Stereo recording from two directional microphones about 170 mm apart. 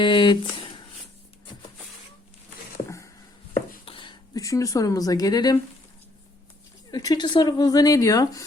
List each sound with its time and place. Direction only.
0.0 s a sound: 30° left (ahead or behind)
3.8 s a woman's voice: 30° left (ahead or behind)
6.9 s speech: 20° left (ahead or behind)